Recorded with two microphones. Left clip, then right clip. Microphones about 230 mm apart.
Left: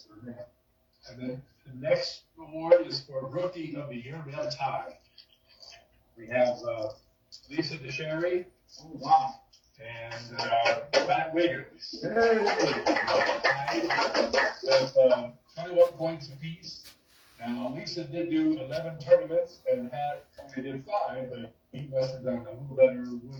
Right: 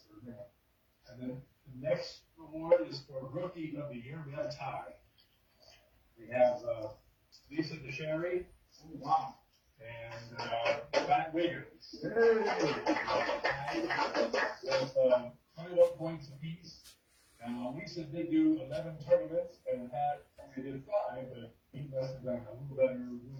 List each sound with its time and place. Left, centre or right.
1.8 s speech: left
6.2 s speech: left